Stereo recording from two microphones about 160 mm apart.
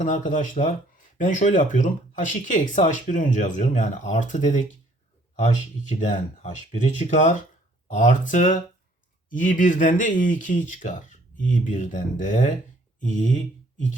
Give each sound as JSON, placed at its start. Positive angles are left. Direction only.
{"t": 0.0, "sound": "speech", "side_deg": 55}
{"t": 5.9, "sound": "speech", "side_deg": 50}